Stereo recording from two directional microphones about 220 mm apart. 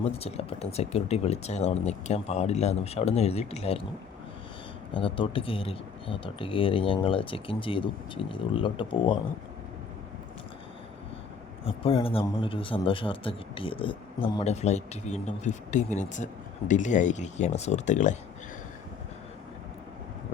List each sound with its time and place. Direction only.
0.0 s speech: 30° left (ahead or behind)
4.9 s speech: 25° left (ahead or behind)
11.6 s a man's voice: 25° left (ahead or behind)